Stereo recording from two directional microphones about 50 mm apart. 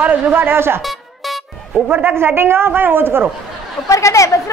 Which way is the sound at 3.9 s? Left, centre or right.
Left.